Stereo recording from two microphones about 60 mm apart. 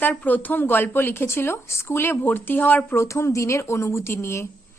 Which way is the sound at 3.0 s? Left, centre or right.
Left.